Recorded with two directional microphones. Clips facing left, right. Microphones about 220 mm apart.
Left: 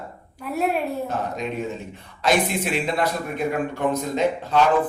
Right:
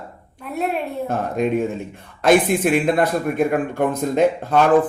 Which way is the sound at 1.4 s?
50° right (ahead or behind).